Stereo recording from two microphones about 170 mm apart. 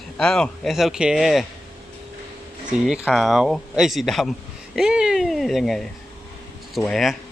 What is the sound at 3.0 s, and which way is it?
Speech, centre (ahead or behind).